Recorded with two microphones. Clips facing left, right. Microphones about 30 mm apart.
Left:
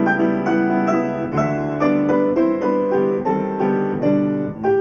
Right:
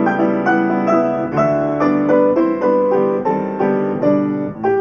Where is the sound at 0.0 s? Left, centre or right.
Centre.